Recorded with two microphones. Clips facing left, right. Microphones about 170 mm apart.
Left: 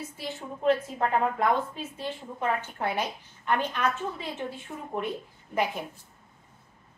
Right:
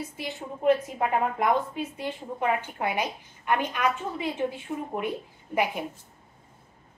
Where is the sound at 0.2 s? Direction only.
15° right (ahead or behind).